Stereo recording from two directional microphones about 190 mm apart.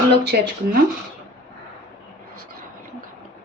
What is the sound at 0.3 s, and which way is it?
Speech, 60° right (ahead or behind).